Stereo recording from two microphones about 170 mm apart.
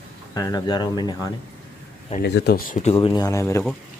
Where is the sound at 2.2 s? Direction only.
75° left (ahead or behind); by 2.9 s 50° left (ahead or behind).